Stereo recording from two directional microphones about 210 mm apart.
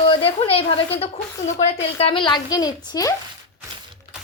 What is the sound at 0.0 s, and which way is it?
A woman's voice, 25° left (ahead or behind).